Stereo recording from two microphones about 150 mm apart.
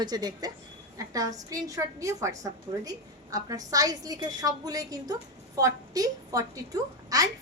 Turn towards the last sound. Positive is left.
turn(degrees=-25)  # may be behind; listen again after turning